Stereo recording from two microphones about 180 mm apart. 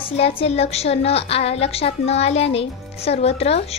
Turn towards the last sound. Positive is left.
turn(degrees=35)  # may be behind; listen again after turning